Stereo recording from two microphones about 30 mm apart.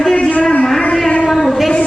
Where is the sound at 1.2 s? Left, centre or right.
Centre.